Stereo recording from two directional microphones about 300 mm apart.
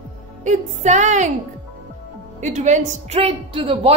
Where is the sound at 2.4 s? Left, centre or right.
Right.